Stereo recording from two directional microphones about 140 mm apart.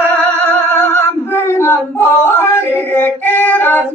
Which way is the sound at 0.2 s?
15° left (ahead or behind).